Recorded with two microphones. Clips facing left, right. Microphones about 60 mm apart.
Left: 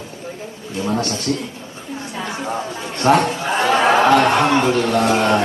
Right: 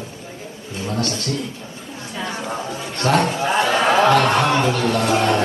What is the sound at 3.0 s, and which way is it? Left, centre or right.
Speech, left.